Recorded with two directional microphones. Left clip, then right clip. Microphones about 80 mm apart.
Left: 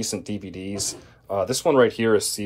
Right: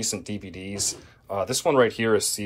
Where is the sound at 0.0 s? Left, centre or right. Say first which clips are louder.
Left 1 dB; left.